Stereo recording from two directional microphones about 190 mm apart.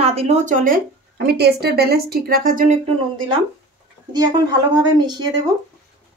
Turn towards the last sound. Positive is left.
turn(degrees=-20)  # may be behind; listen again after turning